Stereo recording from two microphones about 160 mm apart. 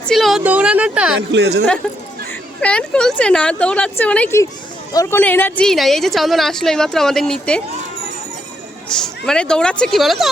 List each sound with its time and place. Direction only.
0.1 s a woman's voice: centre (ahead or behind)
1.4 s speech: 90° right
2.6 s speech: 5° left (ahead or behind)
4.9 s speech: 25° left (ahead or behind)
5.2 s a woman's voice: 10° left (ahead or behind)
9.0 s a woman's voice: 5° left (ahead or behind)